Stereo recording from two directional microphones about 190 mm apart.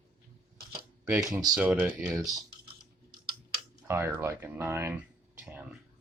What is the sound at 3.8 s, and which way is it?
Speech, 15° right (ahead or behind).